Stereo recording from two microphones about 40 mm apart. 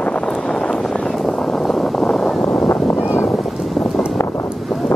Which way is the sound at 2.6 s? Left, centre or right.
Left.